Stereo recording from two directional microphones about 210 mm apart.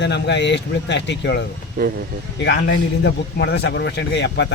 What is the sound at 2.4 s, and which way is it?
Speech, 55° left (ahead or behind).